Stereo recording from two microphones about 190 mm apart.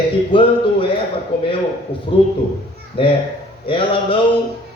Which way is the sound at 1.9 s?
30° left (ahead or behind).